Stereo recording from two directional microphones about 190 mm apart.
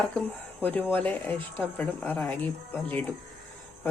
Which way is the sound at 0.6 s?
10° left (ahead or behind).